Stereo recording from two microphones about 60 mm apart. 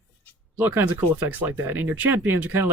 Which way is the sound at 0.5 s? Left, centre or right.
Right.